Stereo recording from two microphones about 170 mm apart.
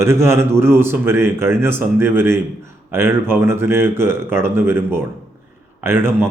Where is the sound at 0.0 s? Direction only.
15° right (ahead or behind).